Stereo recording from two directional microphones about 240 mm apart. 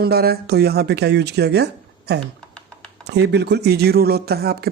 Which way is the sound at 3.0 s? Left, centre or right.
Right.